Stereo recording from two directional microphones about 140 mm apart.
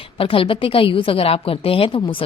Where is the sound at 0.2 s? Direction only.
40° left (ahead or behind).